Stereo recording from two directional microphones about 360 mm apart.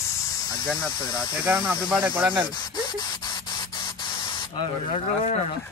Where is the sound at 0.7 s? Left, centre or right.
Centre.